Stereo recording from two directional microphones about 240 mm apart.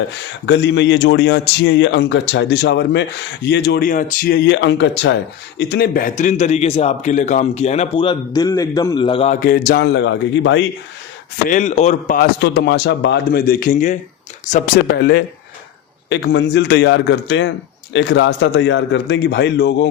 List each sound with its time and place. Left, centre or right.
0.1 s a man's voice: left
11.4 s a man's voice: left